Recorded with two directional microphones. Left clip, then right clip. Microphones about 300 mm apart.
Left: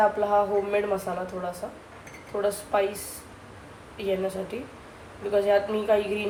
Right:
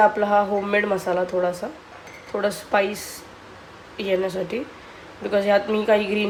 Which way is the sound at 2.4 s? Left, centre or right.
Right.